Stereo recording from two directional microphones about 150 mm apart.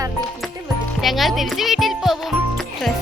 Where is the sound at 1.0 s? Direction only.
Centre (ahead or behind).